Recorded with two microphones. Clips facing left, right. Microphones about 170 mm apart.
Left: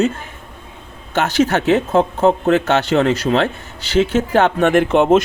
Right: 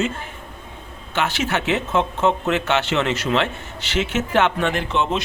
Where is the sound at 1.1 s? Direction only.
40° left (ahead or behind).